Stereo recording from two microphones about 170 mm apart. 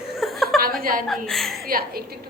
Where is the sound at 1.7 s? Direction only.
60° right (ahead or behind).